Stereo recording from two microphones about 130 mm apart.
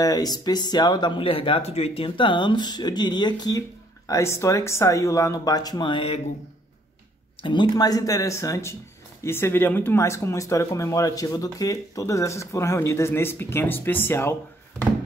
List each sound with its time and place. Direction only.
0.0 s speech: 30° left (ahead or behind)
7.4 s speech: 35° left (ahead or behind); by 14.3 s 15° left (ahead or behind)